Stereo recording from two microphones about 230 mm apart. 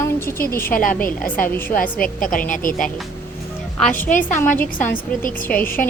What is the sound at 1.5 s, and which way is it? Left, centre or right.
Speech, centre.